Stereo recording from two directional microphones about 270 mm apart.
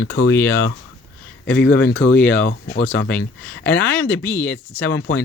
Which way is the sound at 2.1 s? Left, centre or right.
Centre.